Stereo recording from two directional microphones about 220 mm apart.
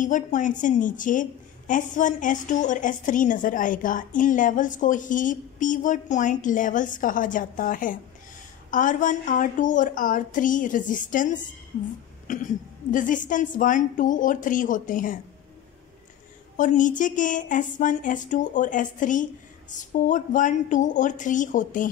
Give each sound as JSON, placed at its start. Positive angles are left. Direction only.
{"t": 0.0, "sound": "a woman's voice", "side_deg": 35}
{"t": 16.5, "sound": "a woman's voice", "side_deg": 35}